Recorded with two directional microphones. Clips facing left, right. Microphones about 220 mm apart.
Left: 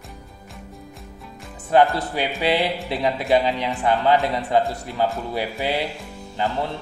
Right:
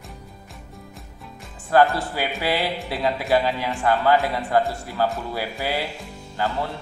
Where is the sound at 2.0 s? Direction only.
20° left (ahead or behind).